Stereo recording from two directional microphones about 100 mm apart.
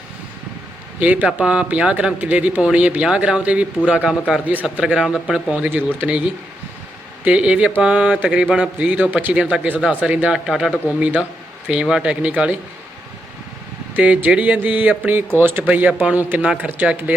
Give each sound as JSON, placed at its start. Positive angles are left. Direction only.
{"t": 0.9, "sound": "speech", "side_deg": -15}
{"t": 7.3, "sound": "speech", "side_deg": -10}
{"t": 13.9, "sound": "speech", "side_deg": -15}